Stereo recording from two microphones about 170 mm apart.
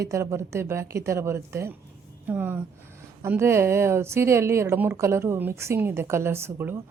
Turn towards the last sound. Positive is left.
turn(degrees=-15)  # may be behind; listen again after turning